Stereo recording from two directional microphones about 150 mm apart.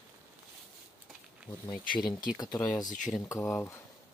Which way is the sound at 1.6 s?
25° left (ahead or behind).